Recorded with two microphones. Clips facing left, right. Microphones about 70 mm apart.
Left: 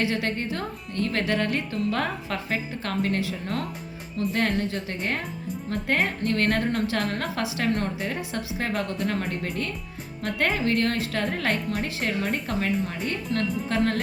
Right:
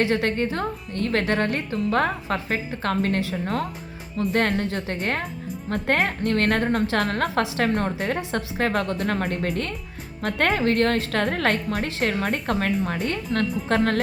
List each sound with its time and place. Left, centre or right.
0.0 s speech: right